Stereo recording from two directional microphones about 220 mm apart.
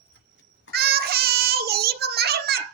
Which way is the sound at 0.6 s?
45° right (ahead or behind).